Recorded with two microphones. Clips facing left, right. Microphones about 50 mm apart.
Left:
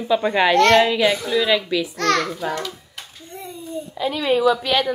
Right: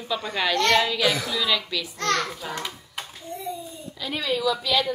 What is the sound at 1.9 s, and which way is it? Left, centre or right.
Speech, left.